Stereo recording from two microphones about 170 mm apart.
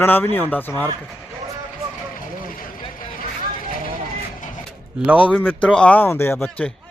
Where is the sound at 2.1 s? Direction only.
55° left (ahead or behind).